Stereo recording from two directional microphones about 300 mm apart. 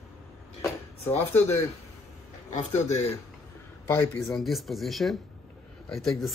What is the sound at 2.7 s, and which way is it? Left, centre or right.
Speech, left.